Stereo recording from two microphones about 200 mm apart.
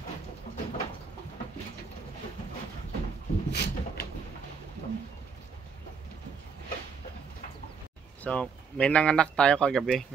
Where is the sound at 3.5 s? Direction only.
55° left (ahead or behind).